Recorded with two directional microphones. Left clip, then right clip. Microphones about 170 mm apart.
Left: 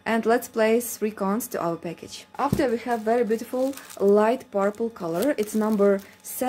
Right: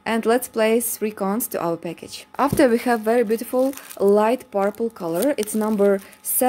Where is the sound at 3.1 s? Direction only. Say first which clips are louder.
Right 1 dB; 35° right (ahead or behind).